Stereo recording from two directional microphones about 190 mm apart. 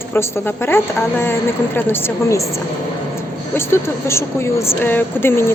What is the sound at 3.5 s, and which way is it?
A woman's voice, 15° left (ahead or behind).